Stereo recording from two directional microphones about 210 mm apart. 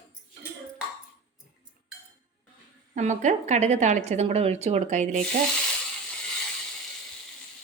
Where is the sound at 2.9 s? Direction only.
35° right (ahead or behind).